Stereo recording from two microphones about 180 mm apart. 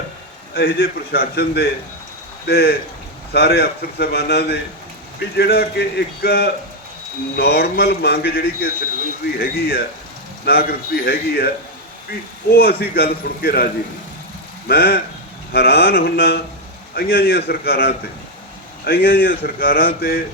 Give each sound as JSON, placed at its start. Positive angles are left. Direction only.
{"t": 0.5, "sound": "speech", "side_deg": 60}
{"t": 14.7, "sound": "speech", "side_deg": 60}